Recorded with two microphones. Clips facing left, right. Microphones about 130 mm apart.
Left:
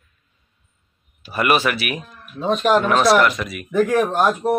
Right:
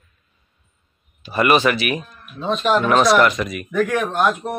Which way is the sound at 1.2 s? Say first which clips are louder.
Right 2 dB; 5° left (ahead or behind).